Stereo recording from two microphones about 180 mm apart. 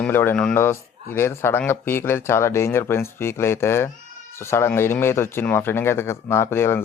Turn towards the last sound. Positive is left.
turn(degrees=15)  # may be behind; listen again after turning